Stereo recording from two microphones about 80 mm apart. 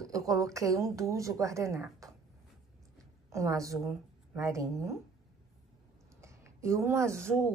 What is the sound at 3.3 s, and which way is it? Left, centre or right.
A woman's voice, right.